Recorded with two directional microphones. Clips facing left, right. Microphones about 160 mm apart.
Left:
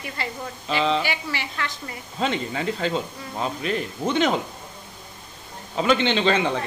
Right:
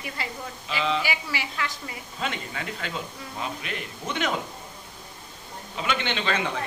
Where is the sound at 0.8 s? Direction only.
35° left (ahead or behind).